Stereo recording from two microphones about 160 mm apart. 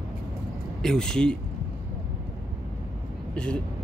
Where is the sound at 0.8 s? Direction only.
5° left (ahead or behind).